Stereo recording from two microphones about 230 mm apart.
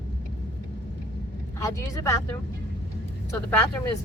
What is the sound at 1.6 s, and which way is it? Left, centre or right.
Speech, centre.